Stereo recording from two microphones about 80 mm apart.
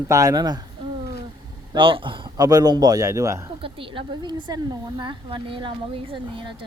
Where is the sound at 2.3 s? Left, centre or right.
Right.